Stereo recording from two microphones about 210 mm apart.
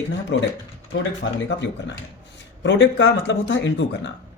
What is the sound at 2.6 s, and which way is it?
Speech, 60° left (ahead or behind).